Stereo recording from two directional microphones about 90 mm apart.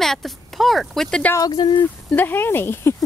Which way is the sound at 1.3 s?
45° left (ahead or behind).